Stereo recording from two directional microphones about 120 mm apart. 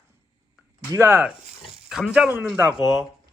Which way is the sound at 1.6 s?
Centre (ahead or behind).